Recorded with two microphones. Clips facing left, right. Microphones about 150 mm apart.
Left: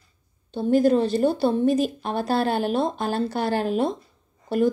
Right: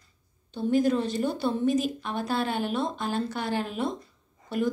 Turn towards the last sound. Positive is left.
turn(degrees=35)  # may be behind; listen again after turning